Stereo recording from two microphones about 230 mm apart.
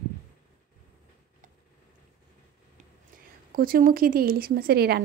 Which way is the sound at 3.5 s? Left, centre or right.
Right.